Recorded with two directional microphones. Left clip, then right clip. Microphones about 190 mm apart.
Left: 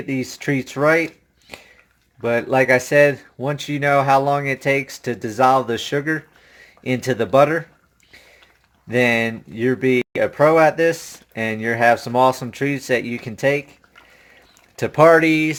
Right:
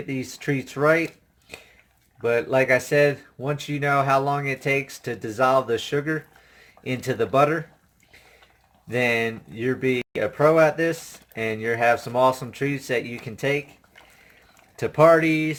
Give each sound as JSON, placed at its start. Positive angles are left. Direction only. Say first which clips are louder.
{"t": 0.1, "sound": "speech", "louder": "left 5 dB", "side_deg": 50}
{"t": 2.2, "sound": "speech", "louder": "left 4 dB", "side_deg": 50}
{"t": 8.9, "sound": "speech", "louder": "left 5 dB", "side_deg": 55}
{"t": 14.8, "sound": "speech", "louder": "left 4 dB", "side_deg": 60}